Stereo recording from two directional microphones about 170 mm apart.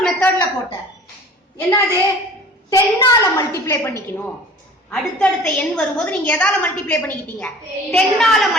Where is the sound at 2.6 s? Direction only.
20° left (ahead or behind).